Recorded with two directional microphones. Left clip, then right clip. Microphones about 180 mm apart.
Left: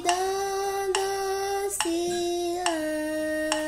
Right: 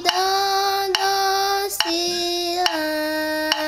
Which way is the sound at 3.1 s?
5° left (ahead or behind).